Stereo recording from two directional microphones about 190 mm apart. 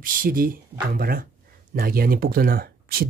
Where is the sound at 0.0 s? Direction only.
45° right (ahead or behind).